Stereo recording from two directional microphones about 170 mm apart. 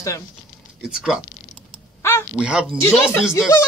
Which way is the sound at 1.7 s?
15° left (ahead or behind).